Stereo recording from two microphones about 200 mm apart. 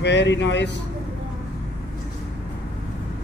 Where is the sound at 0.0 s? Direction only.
60° left (ahead or behind).